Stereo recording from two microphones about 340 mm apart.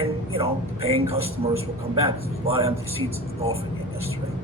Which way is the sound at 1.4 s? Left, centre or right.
Centre.